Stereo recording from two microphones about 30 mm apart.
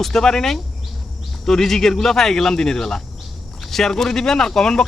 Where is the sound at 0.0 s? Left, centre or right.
Centre.